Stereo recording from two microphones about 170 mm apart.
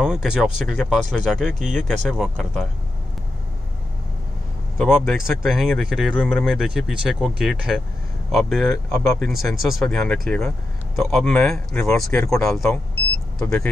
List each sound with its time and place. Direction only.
0.0 s speech: 5° right (ahead or behind)
4.7 s speech: centre (ahead or behind)
8.7 s speech: 15° left (ahead or behind)
9.2 s speech: centre (ahead or behind)